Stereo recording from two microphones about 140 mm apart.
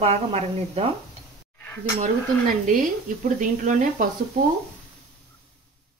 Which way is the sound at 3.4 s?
65° right (ahead or behind).